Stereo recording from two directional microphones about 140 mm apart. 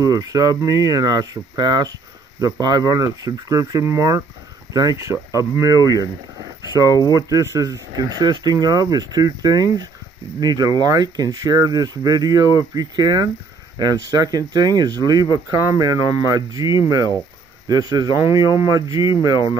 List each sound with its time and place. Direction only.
0.0 s speech: 25° right (ahead or behind)